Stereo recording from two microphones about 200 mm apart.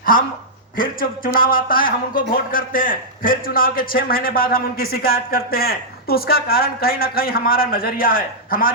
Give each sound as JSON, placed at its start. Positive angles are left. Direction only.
{"t": 0.8, "sound": "a man's voice", "side_deg": 45}